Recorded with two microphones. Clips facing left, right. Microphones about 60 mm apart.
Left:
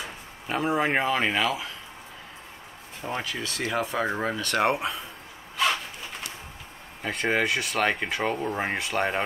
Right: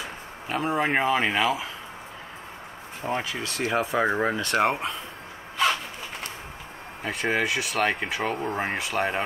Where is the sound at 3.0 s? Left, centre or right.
Centre.